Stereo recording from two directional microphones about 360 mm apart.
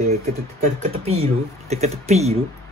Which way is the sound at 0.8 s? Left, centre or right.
Centre.